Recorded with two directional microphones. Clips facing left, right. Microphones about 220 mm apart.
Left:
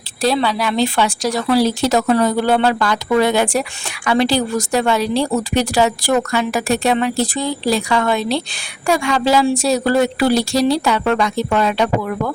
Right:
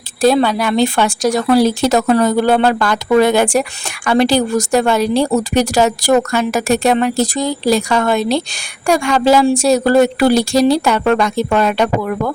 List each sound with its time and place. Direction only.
0.2 s speech: 50° right (ahead or behind)